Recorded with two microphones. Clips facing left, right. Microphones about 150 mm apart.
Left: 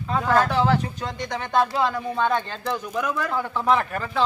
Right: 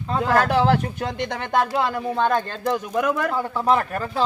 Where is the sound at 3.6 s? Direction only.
35° right (ahead or behind).